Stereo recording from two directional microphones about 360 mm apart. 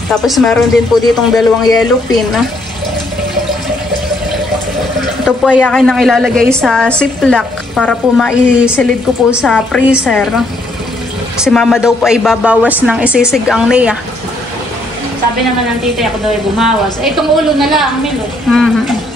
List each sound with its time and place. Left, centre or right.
0.1 s speech: centre
5.2 s speech: centre
11.3 s speech: centre
16.5 s speech: centre
18.5 s a sound: centre